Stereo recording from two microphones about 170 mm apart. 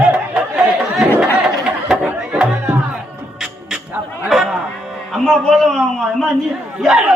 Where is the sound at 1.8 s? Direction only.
5° right (ahead or behind).